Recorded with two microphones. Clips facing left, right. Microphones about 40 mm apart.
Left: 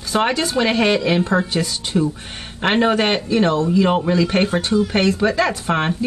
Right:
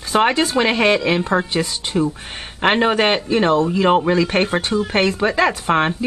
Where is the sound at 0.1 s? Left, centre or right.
Right.